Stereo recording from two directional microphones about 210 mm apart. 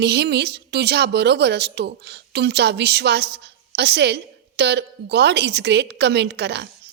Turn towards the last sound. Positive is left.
turn(degrees=-55)  # may be behind; listen again after turning